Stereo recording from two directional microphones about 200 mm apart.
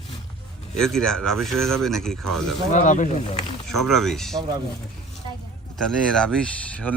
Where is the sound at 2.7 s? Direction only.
40° left (ahead or behind).